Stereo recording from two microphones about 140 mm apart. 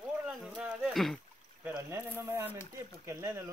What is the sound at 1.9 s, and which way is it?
Speech, 20° right (ahead or behind).